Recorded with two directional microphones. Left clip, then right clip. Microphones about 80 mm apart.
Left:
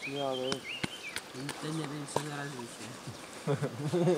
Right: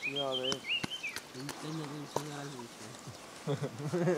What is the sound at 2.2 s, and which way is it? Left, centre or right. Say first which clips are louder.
Speech: left 3 dB; centre.